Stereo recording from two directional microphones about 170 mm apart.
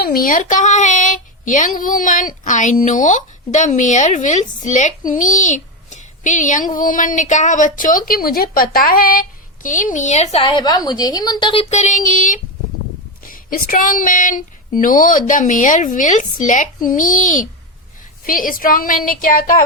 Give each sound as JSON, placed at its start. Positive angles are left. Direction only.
{"t": 0.0, "sound": "child singing", "side_deg": 55}
{"t": 10.4, "sound": "a woman's voice", "side_deg": 25}
{"t": 11.7, "sound": "child singing", "side_deg": 45}
{"t": 18.3, "sound": "a woman's voice", "side_deg": 55}